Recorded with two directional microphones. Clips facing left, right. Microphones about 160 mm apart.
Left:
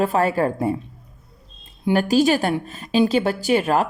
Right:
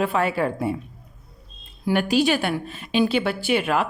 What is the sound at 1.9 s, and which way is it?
A woman's voice, 40° left (ahead or behind).